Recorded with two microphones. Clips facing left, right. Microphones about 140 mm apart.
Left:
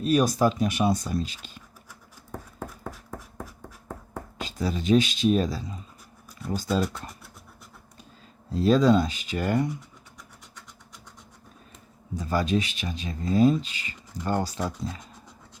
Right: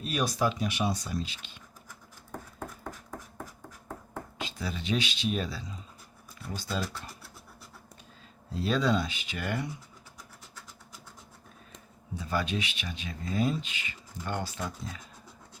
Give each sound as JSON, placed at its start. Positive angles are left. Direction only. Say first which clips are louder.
{"t": 0.0, "sound": "speech", "louder": "left 7 dB", "side_deg": 40}
{"t": 2.9, "sound": "a sound", "louder": "left 2 dB", "side_deg": 0}
{"t": 4.4, "sound": "speech", "louder": "left 8 dB", "side_deg": 40}
{"t": 8.5, "sound": "speech", "louder": "left 8 dB", "side_deg": 40}
{"t": 12.1, "sound": "speech", "louder": "left 6 dB", "side_deg": 40}